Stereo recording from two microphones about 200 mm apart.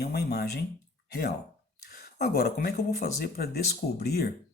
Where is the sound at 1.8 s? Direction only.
50° left (ahead or behind).